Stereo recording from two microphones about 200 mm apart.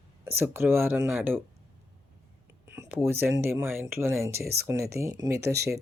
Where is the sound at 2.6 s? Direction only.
15° right (ahead or behind).